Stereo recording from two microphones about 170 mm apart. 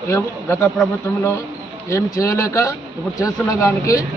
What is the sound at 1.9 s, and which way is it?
A man's voice, 15° left (ahead or behind).